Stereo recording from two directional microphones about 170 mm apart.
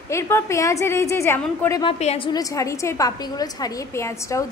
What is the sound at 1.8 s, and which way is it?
Speech, 35° left (ahead or behind).